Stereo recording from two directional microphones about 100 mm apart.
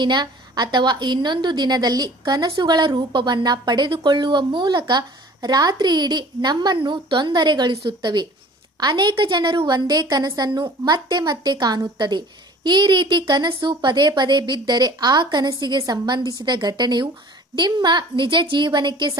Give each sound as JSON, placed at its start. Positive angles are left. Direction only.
{"t": 0.0, "sound": "a woman's voice", "side_deg": -50}